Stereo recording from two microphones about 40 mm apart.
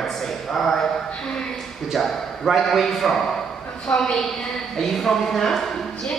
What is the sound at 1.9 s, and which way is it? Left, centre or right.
A man's voice, centre.